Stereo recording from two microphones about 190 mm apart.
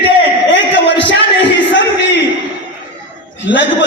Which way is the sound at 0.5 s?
75° left (ahead or behind).